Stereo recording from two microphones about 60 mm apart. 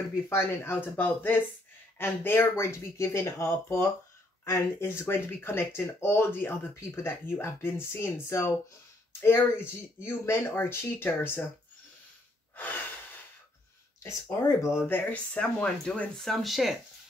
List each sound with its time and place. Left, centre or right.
0.3 s speech: left
12.5 s gasp: left
14.3 s speech: left
14.9 s speech: left
15.3 s speech: centre
16.2 s speech: centre